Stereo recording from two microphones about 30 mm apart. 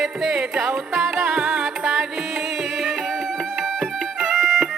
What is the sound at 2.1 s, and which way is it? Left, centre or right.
Music, centre.